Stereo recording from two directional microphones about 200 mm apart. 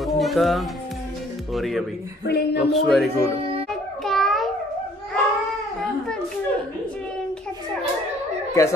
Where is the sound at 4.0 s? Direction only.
Centre (ahead or behind).